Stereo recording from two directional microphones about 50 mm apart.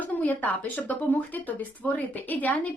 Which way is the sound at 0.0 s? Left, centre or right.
Left.